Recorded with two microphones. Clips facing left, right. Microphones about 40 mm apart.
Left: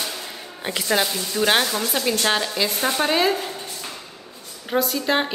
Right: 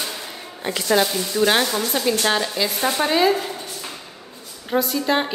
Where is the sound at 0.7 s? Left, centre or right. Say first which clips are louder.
Right 3 dB; centre.